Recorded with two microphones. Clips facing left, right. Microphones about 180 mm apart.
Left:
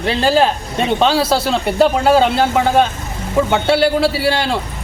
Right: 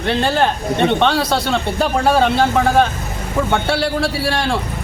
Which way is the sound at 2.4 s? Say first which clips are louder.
Left 1 dB; centre (ahead or behind).